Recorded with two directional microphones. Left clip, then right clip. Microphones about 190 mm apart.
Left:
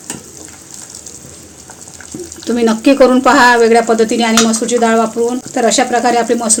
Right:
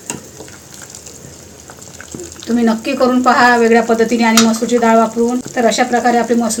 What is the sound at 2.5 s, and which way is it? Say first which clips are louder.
A woman's voice: left 5 dB; 55° left (ahead or behind).